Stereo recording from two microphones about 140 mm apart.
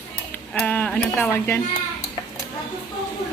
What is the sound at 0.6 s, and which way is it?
A woman's voice, 10° left (ahead or behind).